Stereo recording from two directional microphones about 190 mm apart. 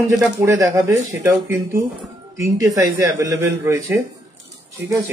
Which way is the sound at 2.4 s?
15° right (ahead or behind).